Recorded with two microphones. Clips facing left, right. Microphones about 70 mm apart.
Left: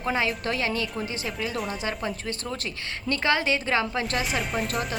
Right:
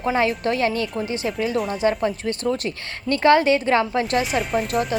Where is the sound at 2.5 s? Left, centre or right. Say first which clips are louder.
Right 8 dB; right.